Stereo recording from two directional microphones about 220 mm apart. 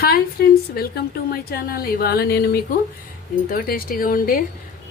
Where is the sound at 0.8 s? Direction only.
45° left (ahead or behind).